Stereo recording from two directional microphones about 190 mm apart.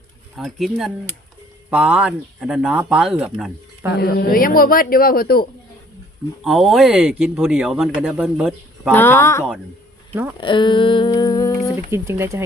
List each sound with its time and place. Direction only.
0.3 s speech: centre (ahead or behind)
3.9 s speech: 55° left (ahead or behind)
6.4 s speech: centre (ahead or behind)
8.9 s speech: 10° left (ahead or behind)
10.4 s a sound: 25° left (ahead or behind)
11.9 s speech: 15° right (ahead or behind)